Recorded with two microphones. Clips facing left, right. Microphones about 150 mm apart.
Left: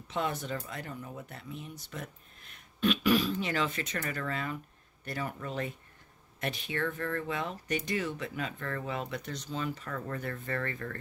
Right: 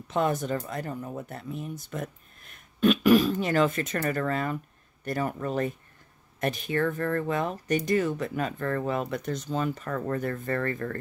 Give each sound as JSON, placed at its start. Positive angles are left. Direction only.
{"t": 0.1, "sound": "speech", "side_deg": -45}